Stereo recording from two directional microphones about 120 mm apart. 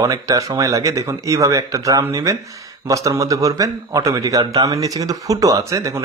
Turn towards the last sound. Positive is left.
turn(degrees=-25)  # may be behind; listen again after turning